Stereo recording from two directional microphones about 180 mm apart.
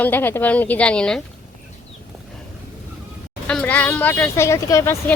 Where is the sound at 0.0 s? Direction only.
10° left (ahead or behind).